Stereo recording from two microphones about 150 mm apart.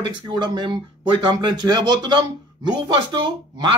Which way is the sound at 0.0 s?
30° right (ahead or behind).